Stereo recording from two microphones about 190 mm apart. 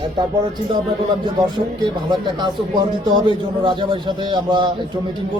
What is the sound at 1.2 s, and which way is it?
A man's voice, 20° right (ahead or behind).